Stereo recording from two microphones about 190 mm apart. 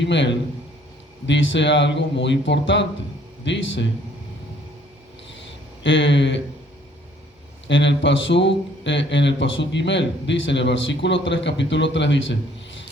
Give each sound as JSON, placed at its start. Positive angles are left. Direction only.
{"t": 0.0, "sound": "speech", "side_deg": 70}
{"t": 5.8, "sound": "speech", "side_deg": 75}
{"t": 7.7, "sound": "speech", "side_deg": 75}